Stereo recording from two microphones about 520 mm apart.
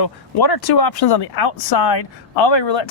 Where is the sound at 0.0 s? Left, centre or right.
Left.